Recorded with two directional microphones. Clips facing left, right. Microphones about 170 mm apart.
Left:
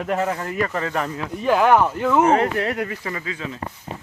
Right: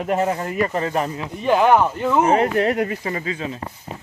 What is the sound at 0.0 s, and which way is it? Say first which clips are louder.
Speech: right 2 dB; 25° right (ahead or behind).